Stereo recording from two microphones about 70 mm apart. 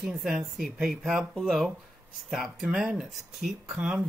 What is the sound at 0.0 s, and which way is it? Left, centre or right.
Speech, centre.